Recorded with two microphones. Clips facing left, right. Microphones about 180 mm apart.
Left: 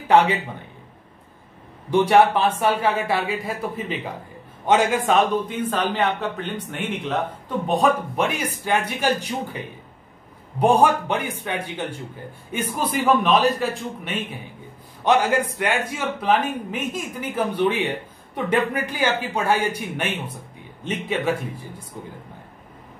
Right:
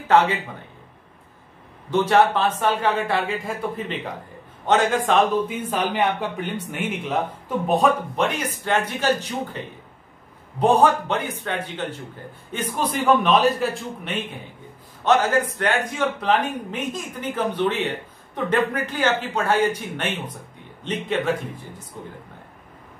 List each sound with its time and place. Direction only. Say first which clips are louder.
1.9 s speech: left 2 dB; 10° left (ahead or behind)
5.7 s a man's voice: left 1 dB; 10° right (ahead or behind)
8.5 s speech: even; 10° left (ahead or behind)
10.6 s a man's voice: even; 10° left (ahead or behind)
15.0 s speech: even; 10° left (ahead or behind)